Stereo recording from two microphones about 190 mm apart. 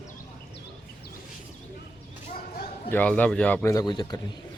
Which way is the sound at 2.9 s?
10° left (ahead or behind).